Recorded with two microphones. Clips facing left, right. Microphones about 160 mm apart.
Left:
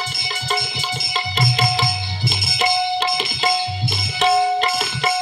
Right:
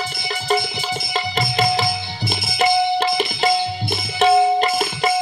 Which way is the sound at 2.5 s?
60° right (ahead or behind).